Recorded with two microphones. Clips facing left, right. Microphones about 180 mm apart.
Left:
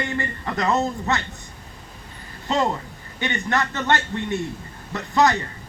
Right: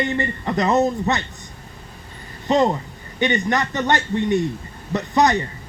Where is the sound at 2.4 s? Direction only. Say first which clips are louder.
Right 5 dB; 20° right (ahead or behind).